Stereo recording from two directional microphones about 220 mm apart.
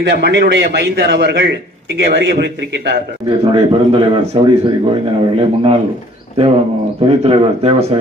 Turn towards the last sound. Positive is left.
turn(degrees=-25)  # may be behind; listen again after turning